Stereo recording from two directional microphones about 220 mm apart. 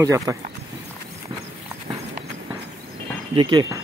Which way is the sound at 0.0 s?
15° right (ahead or behind).